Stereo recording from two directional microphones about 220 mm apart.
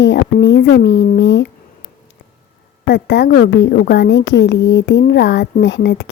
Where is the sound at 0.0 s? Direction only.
55° left (ahead or behind).